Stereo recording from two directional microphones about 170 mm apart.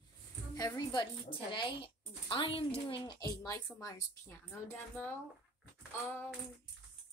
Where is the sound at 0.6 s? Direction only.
25° left (ahead or behind).